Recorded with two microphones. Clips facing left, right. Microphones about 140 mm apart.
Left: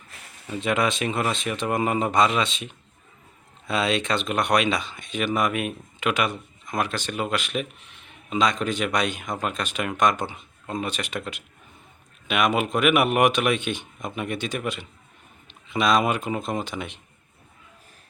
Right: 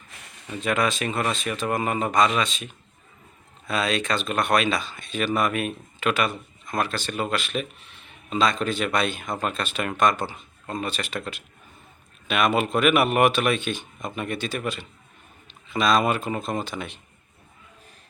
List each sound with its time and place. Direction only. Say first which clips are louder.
0.6 s speech: even; 20° left (ahead or behind)